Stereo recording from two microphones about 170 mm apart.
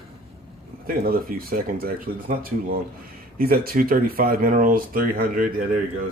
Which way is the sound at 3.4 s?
60° right (ahead or behind).